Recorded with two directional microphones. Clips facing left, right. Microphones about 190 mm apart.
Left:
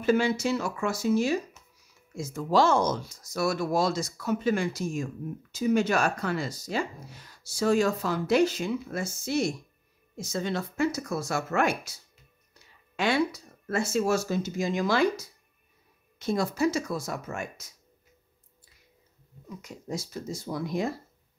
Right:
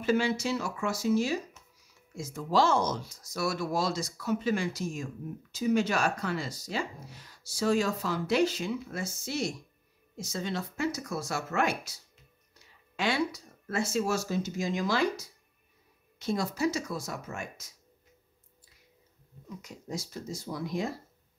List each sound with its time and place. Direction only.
0.0 s speech: 50° left (ahead or behind)
12.9 s speech: 55° left (ahead or behind)
19.6 s speech: 55° left (ahead or behind)